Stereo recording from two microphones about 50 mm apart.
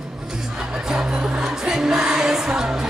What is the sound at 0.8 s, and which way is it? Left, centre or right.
Music, centre.